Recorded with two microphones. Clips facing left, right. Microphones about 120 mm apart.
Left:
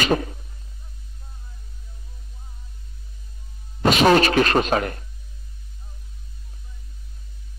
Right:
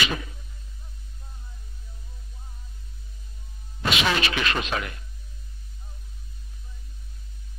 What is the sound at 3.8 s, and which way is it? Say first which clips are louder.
Speech: left 9 dB; 45° left (ahead or behind).